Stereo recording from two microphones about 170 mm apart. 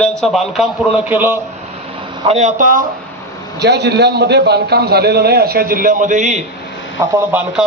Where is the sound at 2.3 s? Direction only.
45° right (ahead or behind).